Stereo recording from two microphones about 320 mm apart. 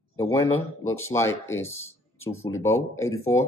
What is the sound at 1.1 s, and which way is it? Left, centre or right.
Speech, centre.